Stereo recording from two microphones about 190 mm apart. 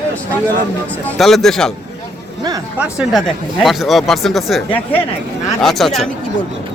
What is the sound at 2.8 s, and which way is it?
A man's voice, centre (ahead or behind).